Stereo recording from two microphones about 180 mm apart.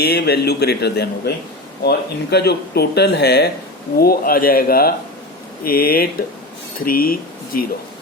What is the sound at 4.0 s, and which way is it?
A man's voice, 55° left (ahead or behind).